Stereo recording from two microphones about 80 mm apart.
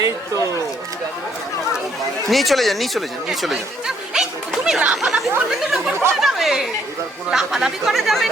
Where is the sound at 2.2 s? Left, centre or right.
Centre.